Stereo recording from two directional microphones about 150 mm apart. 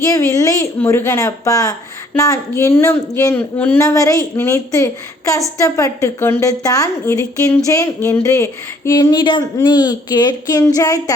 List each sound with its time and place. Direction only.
0.0 s a woman's voice: 20° left (ahead or behind)